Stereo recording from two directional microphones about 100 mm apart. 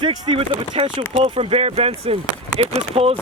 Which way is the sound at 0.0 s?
60° right (ahead or behind).